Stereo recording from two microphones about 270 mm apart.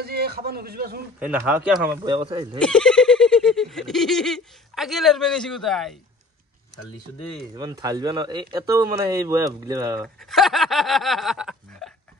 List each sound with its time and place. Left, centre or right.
0.0 s a man's voice: right
1.3 s a sound: centre
2.0 s speech: centre
2.6 s a sound: centre
7.5 s speech: centre
10.0 s speech: centre